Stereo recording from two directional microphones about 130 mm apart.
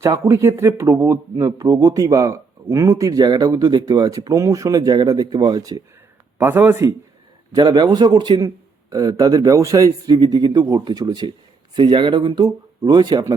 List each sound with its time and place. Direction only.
0.0 s speech: 25° right (ahead or behind)
6.4 s speech: 20° right (ahead or behind)
7.5 s a man's voice: 30° right (ahead or behind)